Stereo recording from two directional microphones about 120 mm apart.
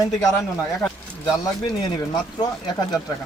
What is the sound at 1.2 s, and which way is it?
Speech, 40° left (ahead or behind).